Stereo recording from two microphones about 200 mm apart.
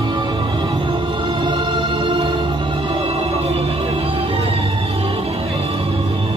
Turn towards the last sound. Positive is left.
turn(degrees=-25)  # may be behind; listen again after turning